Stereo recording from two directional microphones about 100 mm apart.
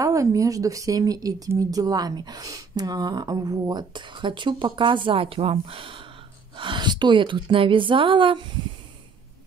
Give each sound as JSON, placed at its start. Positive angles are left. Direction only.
{"t": 0.0, "sound": "a woman's voice", "side_deg": -35}